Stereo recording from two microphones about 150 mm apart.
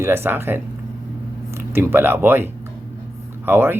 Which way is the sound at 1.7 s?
15° right (ahead or behind).